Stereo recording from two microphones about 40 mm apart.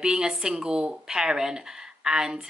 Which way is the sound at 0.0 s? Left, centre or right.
Centre.